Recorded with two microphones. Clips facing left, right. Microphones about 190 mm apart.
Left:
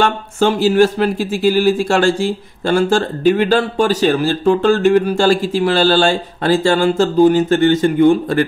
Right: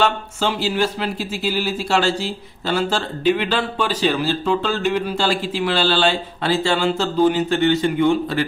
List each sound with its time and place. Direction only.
0.0 s speech: 50° left (ahead or behind)